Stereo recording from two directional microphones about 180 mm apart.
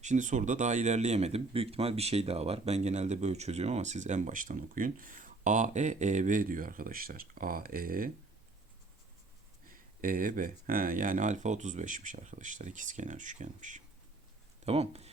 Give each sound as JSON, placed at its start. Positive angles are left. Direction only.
{"t": 0.0, "sound": "speech", "side_deg": -45}
{"t": 9.6, "sound": "speech", "side_deg": -50}